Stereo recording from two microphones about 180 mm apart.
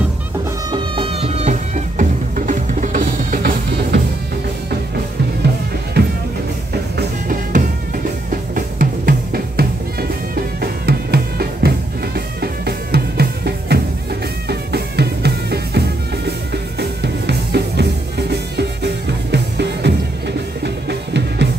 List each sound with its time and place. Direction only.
0.7 s music: 25° right (ahead or behind); by 4.0 s 50° right (ahead or behind)
6.0 s music: 65° right (ahead or behind)
7.0 s music: 45° right (ahead or behind); by 15.8 s 65° right (ahead or behind)
16.8 s drum kit: 65° right (ahead or behind)
20.6 s music: 70° right (ahead or behind)